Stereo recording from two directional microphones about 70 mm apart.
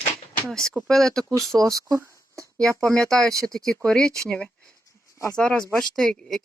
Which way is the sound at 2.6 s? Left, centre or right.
Centre.